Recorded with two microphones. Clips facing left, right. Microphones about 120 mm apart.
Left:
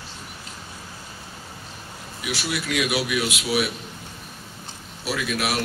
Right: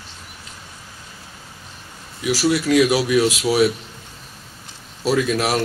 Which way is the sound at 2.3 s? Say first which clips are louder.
Right 10 dB; 35° right (ahead or behind).